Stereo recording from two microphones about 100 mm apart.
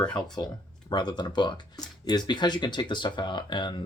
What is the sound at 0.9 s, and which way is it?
Speech, 50° left (ahead or behind).